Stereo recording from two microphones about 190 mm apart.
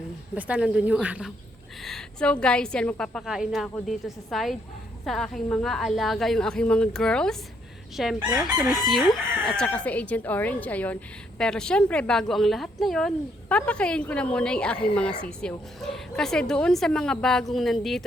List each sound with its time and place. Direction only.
0.3 s a woman's voice: 5° right (ahead or behind)